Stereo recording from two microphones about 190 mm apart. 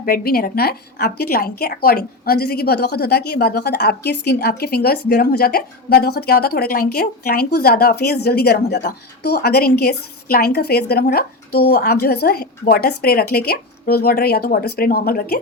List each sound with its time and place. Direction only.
0.0 s a woman's voice: 55° left (ahead or behind)